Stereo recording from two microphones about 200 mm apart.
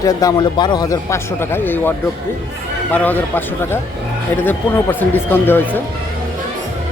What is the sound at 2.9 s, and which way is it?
A man's voice, 10° left (ahead or behind).